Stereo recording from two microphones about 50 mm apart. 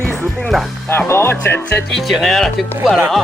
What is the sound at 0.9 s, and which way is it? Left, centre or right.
Speech, left.